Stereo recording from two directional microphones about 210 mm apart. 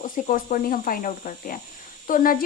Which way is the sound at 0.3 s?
40° left (ahead or behind).